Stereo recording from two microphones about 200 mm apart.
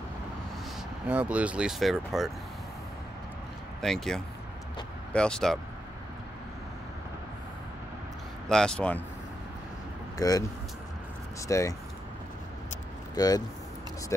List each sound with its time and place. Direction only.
1.0 s speech: 5° right (ahead or behind)
3.8 s speech: centre (ahead or behind)
8.5 s speech: 5° left (ahead or behind)
10.1 s speech: 15° left (ahead or behind)
11.4 s speech: 15° left (ahead or behind)
13.1 s speech: 20° left (ahead or behind)